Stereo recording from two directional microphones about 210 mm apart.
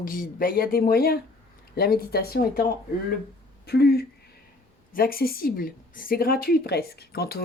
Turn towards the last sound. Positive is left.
turn(degrees=50)  # may be behind; listen again after turning